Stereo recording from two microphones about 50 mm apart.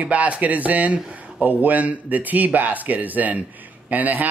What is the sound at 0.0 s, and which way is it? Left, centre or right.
A man's voice, right.